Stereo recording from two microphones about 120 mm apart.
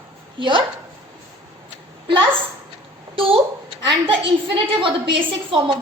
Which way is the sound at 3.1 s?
50° right (ahead or behind).